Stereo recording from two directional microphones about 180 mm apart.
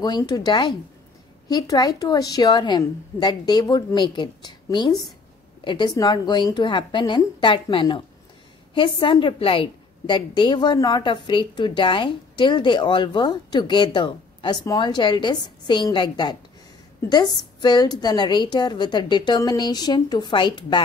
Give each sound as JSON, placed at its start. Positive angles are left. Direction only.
{"t": 0.0, "sound": "a woman's voice", "side_deg": 20}